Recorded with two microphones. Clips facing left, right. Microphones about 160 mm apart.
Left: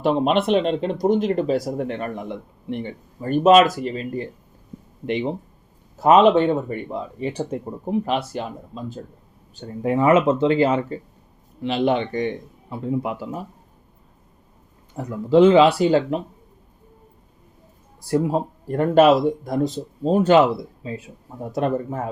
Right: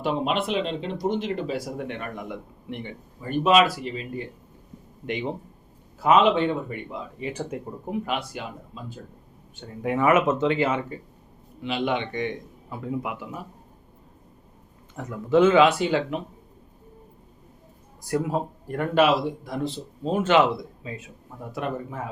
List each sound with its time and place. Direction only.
0.0 s speech: 45° left (ahead or behind)
3.2 s speech: 45° left (ahead or behind)
5.0 s speech: 25° left (ahead or behind)
6.0 s speech: 40° left (ahead or behind)
14.9 s speech: 30° left (ahead or behind)
18.0 s speech: 30° left (ahead or behind)